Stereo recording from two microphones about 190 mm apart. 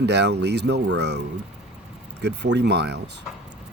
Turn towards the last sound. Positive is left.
turn(degrees=-60)  # may be behind; listen again after turning